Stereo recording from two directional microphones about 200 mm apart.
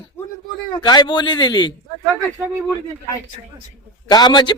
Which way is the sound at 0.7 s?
20° left (ahead or behind).